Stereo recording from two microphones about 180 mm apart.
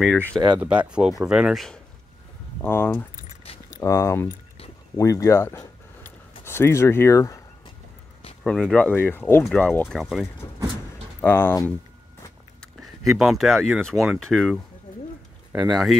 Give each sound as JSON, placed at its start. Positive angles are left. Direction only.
{"t": 0.0, "sound": "speech", "side_deg": 5}
{"t": 0.6, "sound": "speech", "side_deg": -5}
{"t": 2.6, "sound": "speech", "side_deg": 10}
{"t": 3.5, "sound": "keys jangling", "side_deg": 30}
{"t": 3.8, "sound": "speech", "side_deg": 15}
{"t": 8.5, "sound": "speech", "side_deg": 5}
{"t": 11.1, "sound": "speech", "side_deg": 10}
{"t": 13.0, "sound": "speech", "side_deg": 0}